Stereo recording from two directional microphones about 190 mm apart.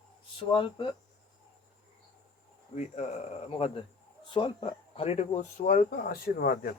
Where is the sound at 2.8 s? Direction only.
35° left (ahead or behind).